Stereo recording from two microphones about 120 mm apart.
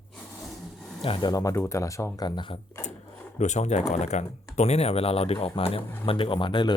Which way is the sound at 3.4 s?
75° left (ahead or behind).